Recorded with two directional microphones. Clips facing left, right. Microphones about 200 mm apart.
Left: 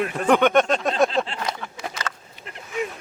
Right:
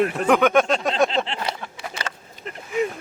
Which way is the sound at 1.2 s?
25° right (ahead or behind).